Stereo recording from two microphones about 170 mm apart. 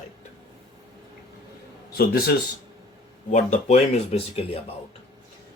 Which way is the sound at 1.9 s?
65° left (ahead or behind).